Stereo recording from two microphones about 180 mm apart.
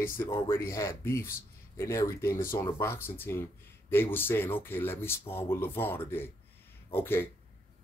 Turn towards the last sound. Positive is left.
turn(degrees=10)  # may be behind; listen again after turning